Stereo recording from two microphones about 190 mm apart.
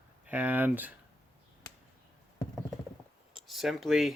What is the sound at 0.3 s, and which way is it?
Speech, 10° right (ahead or behind).